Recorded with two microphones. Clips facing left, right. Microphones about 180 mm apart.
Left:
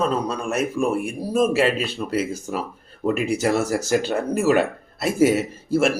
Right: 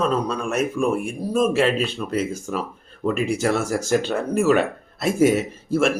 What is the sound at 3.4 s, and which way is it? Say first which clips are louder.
Speech: left 1 dB; 10° left (ahead or behind).